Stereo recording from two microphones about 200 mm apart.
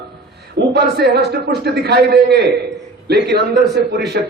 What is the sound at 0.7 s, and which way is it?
A man's voice, 55° right (ahead or behind).